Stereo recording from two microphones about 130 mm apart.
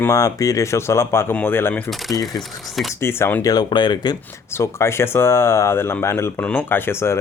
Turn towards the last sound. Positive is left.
turn(degrees=20)  # may be behind; listen again after turning